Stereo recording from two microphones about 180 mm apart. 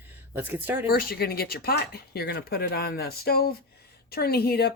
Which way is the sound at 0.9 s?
55° left (ahead or behind).